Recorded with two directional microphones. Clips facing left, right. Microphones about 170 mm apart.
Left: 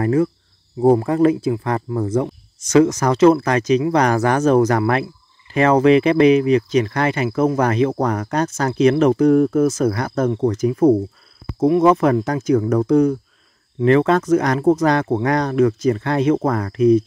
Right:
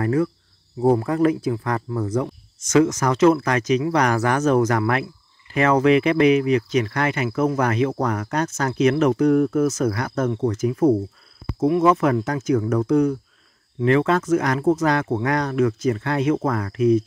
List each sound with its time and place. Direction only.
0.0 s speech: 25° left (ahead or behind)